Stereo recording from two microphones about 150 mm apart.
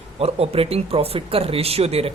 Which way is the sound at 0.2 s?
40° right (ahead or behind).